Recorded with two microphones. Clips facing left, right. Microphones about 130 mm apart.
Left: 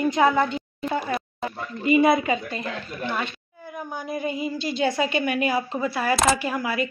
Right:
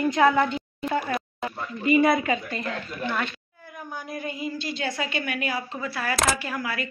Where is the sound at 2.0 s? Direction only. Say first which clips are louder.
Left 3 dB; 10° left (ahead or behind).